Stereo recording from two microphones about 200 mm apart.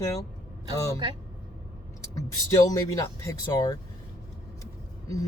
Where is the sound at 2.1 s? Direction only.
15° left (ahead or behind).